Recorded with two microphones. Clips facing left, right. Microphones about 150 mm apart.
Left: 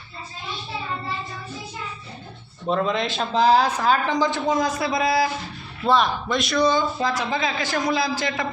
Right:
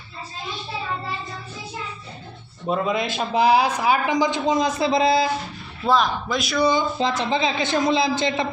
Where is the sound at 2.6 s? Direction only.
5° right (ahead or behind); by 5.3 s 25° right (ahead or behind).